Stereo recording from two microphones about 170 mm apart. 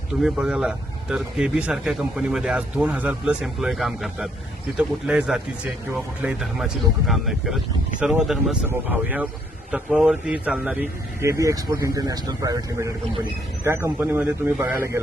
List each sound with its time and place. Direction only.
0.1 s a man's voice: 5° right (ahead or behind)